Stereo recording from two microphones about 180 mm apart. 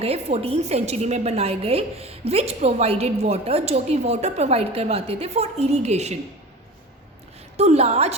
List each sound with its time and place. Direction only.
0.0 s a woman's voice: 35° right (ahead or behind)
7.5 s a woman's voice: 35° right (ahead or behind)